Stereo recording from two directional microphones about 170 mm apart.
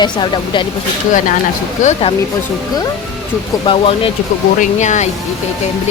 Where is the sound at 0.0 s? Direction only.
25° left (ahead or behind).